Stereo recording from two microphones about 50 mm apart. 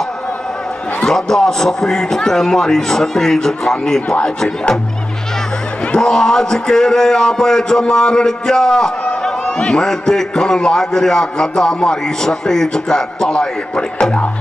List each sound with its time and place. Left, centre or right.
1.0 s a man's voice: centre
5.9 s a man's voice: centre